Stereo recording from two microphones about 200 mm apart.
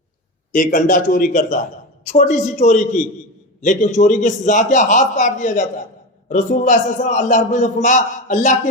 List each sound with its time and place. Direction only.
0.5 s a man's voice: 40° left (ahead or behind)